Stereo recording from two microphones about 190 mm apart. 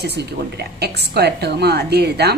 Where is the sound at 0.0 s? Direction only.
60° right (ahead or behind).